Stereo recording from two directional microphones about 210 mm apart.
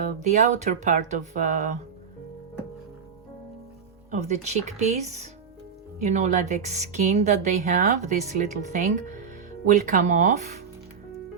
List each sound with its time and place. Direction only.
0.0 s speech: 35° right (ahead or behind)
4.1 s speech: 35° right (ahead or behind)